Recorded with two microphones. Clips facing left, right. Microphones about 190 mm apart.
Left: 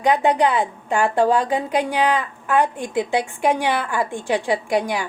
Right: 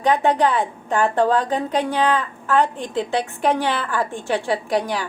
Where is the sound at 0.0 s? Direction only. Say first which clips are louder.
Even; 15° left (ahead or behind).